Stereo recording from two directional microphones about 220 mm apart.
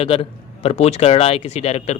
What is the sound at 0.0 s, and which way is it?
Speech, 25° left (ahead or behind).